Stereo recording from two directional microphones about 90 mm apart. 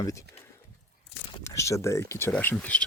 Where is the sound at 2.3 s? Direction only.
15° left (ahead or behind).